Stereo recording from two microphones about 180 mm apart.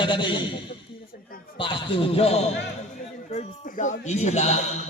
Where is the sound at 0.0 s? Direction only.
25° left (ahead or behind).